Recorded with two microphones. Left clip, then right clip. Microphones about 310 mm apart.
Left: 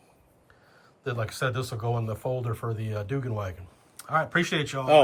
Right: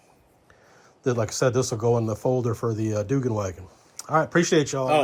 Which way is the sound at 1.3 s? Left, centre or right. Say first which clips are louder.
Right 7 dB; centre.